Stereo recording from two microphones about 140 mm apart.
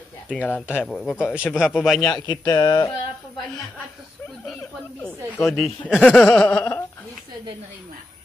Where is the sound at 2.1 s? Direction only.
30° left (ahead or behind).